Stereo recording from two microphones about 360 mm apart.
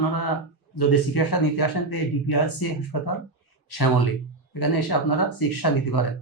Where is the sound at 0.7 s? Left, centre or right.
Left.